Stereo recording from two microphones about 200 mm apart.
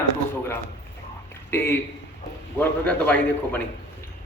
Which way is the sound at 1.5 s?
10° left (ahead or behind).